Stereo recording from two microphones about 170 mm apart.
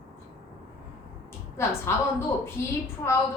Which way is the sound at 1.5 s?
15° left (ahead or behind).